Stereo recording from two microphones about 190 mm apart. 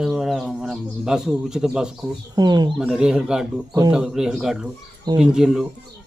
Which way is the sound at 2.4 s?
20° right (ahead or behind).